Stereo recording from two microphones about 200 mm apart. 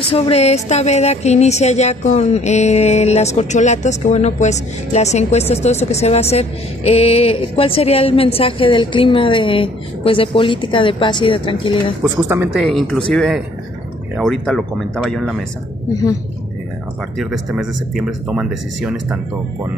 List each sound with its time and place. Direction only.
0.1 s speech: 30° left (ahead or behind)
12.0 s a woman's voice: 10° right (ahead or behind)
12.5 s speech: centre (ahead or behind)
15.9 s a woman's voice: 15° left (ahead or behind)
17.2 s speech: centre (ahead or behind)